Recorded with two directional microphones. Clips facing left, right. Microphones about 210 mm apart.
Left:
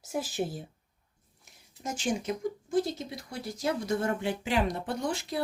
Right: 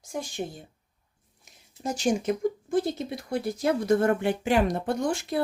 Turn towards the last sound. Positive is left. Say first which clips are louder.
# right 5 dB
turn(degrees=-50)  # may be behind; listen again after turning